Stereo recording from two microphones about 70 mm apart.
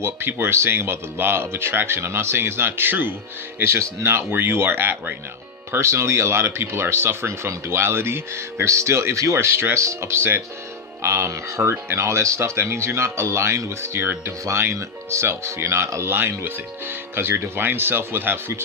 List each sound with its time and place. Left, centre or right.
0.0 s speech: right
5.7 s speech: right